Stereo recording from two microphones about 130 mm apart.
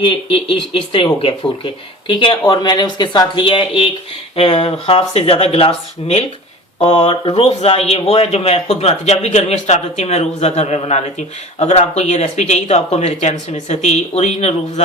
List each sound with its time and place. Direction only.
0.0 s speech: 40° left (ahead or behind)